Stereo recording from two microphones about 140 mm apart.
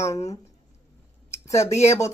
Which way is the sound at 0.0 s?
25° left (ahead or behind).